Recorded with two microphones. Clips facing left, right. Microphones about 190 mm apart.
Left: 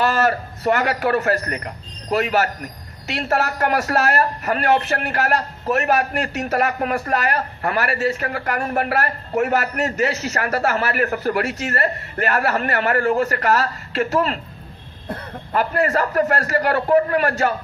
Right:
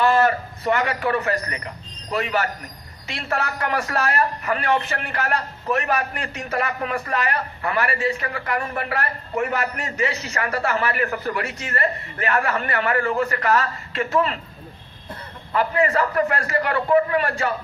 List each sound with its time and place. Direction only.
0.6 s a man's voice: 40° left (ahead or behind)
3.1 s a man's voice: 40° left (ahead or behind)